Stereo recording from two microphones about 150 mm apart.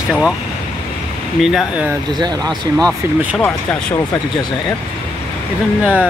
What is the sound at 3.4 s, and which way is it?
Speech, 15° left (ahead or behind).